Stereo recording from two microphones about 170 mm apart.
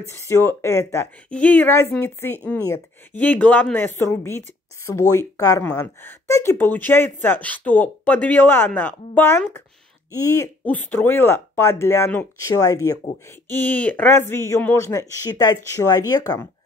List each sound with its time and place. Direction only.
0.2 s a woman's voice: 15° left (ahead or behind)